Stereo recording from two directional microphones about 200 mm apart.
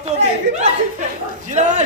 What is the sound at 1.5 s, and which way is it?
Speech, 35° right (ahead or behind).